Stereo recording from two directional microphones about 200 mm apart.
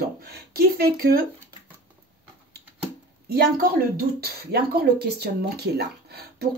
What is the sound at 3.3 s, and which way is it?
Speech, 50° right (ahead or behind).